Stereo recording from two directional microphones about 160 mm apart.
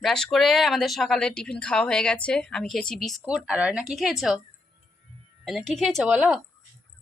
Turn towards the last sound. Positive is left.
turn(degrees=-5)  # may be behind; listen again after turning